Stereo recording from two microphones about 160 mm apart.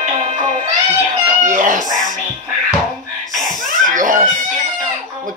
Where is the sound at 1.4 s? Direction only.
50° right (ahead or behind).